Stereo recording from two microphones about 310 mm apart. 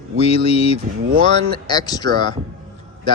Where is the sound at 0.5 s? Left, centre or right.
Centre.